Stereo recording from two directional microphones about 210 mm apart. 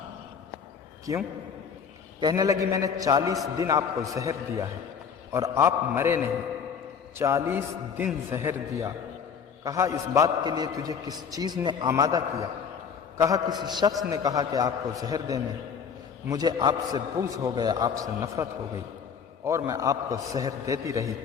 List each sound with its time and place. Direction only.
1.1 s a man's voice: 15° right (ahead or behind)
19.5 s a man's voice: 15° right (ahead or behind)